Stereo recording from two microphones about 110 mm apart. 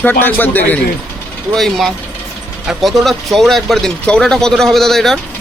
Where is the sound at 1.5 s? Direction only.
Centre (ahead or behind).